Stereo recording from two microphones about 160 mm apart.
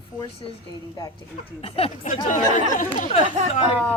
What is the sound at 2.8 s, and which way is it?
Speech, 55° left (ahead or behind).